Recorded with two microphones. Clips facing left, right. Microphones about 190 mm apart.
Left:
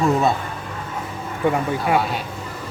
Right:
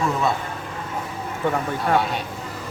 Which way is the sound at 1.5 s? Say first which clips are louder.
Right 1 dB; 5° left (ahead or behind).